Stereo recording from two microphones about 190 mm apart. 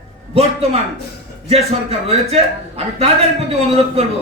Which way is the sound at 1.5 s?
30° right (ahead or behind).